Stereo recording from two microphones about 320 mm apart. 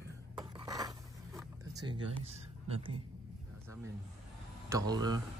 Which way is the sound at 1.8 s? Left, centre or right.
Centre.